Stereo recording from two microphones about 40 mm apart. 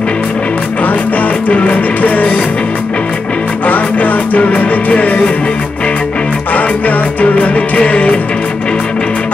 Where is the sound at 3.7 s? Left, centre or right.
Left.